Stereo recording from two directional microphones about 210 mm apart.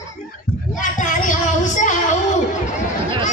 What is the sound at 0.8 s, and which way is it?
Child singing, 40° left (ahead or behind).